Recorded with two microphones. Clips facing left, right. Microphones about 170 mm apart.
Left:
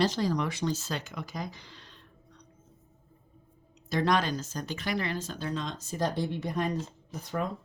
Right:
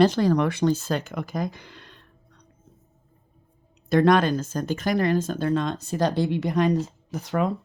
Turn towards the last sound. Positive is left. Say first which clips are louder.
# right 8 dB
turn(degrees=-80)